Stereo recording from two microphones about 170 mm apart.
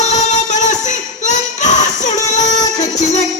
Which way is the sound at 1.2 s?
45° left (ahead or behind).